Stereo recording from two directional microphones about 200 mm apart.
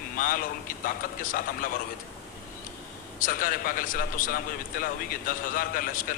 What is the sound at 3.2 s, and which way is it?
A man's voice, 45° left (ahead or behind).